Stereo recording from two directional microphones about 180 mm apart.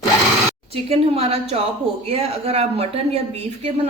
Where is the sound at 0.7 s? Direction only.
35° right (ahead or behind).